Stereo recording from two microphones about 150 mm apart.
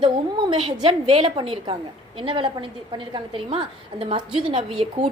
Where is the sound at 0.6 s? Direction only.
35° right (ahead or behind).